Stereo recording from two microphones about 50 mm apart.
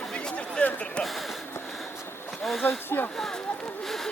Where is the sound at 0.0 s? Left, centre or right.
Centre.